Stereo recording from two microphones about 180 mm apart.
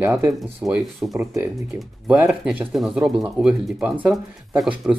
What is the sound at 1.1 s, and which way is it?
Speech, 15° right (ahead or behind).